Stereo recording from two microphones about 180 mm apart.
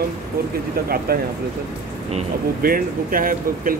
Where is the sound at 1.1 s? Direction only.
55° right (ahead or behind).